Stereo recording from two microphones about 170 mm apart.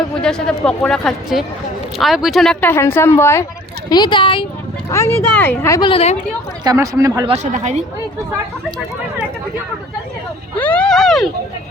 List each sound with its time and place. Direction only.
0.2 s speech: 5° left (ahead or behind)
3.8 s speech: 25° left (ahead or behind)
4.9 s speech: 15° left (ahead or behind)
5.8 s a woman's voice: 35° left (ahead or behind)
6.7 s speech: 20° right (ahead or behind)
7.3 s speech: 45° right (ahead or behind)
10.6 s speech: 10° left (ahead or behind)